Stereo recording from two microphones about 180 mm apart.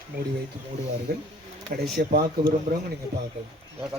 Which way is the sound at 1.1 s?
55° right (ahead or behind).